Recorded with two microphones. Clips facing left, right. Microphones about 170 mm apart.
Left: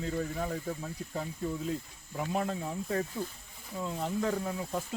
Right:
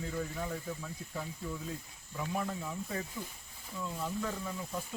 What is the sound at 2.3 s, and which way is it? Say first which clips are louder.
Speech: left 4 dB; 70° left (ahead or behind).